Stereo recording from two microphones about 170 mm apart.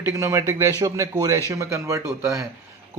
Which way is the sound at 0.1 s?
15° right (ahead or behind).